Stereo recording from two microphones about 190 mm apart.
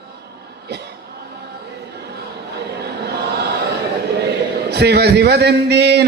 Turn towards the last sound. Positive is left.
turn(degrees=-60)  # may be behind; listen again after turning